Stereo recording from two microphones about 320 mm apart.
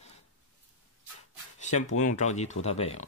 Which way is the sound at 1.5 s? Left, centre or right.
Left.